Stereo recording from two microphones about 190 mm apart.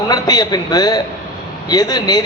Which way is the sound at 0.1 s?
20° left (ahead or behind).